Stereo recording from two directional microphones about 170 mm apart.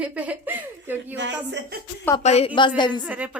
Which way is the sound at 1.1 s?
90° right.